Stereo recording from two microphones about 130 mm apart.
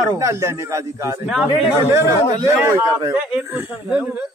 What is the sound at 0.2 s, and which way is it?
Speech, 25° right (ahead or behind).